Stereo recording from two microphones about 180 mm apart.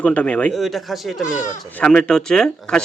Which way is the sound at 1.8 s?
5° left (ahead or behind).